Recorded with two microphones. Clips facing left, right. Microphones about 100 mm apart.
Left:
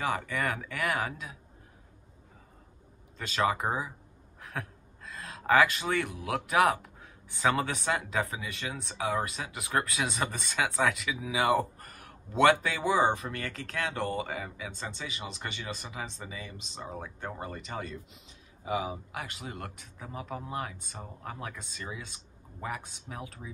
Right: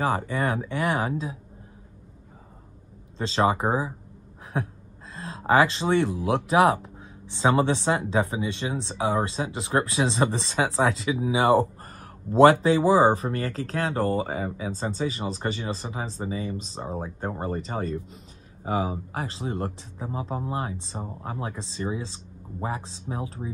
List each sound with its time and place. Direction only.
0.0 s speech: 30° right (ahead or behind)
3.2 s speech: 25° right (ahead or behind)